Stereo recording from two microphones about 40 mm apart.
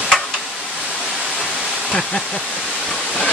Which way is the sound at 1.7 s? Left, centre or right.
Left.